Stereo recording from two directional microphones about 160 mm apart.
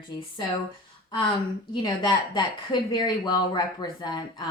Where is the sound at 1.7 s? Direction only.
30° left (ahead or behind).